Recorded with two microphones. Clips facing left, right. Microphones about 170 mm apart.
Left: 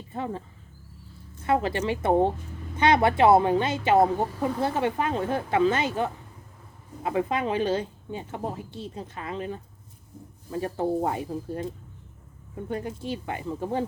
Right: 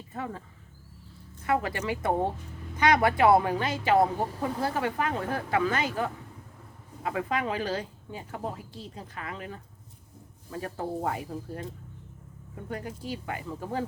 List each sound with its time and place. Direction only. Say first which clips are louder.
0.1 s a woman's voice: left 4 dB; 25° left (ahead or behind)
1.5 s a woman's voice: left 4 dB; 25° left (ahead or behind)